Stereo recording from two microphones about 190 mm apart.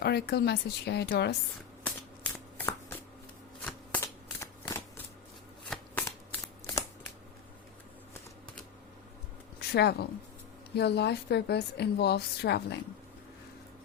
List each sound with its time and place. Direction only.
0.0 s a woman's voice: 55° left (ahead or behind)
1.8 s shuffling cards: 10° left (ahead or behind)
9.6 s a woman's voice: 60° left (ahead or behind)